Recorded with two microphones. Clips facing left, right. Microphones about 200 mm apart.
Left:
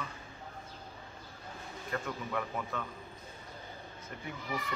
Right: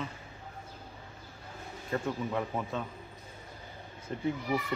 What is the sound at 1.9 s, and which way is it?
Speech, 25° right (ahead or behind).